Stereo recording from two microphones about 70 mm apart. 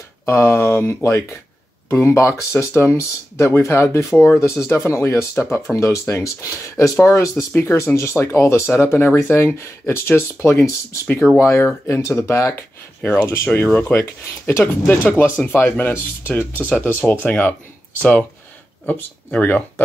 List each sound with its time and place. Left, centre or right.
0.3 s speech: left
2.1 s speech: left
19.3 s speech: left